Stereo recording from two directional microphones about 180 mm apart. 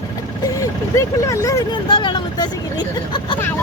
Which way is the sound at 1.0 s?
15° left (ahead or behind).